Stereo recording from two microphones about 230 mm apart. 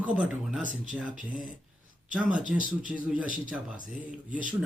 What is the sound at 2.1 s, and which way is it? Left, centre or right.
Speech, centre.